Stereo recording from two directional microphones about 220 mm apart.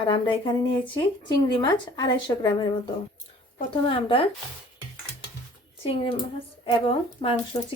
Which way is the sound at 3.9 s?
25° left (ahead or behind).